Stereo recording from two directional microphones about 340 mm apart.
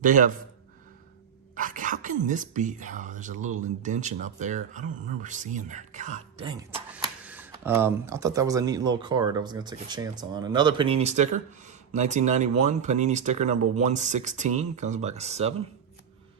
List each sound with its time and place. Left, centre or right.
0.0 s speech: right
1.5 s speech: right